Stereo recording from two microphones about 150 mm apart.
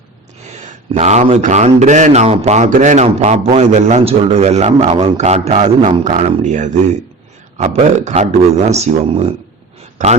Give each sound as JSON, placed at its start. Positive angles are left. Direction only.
{"t": 0.5, "sound": "a man's voice", "side_deg": -50}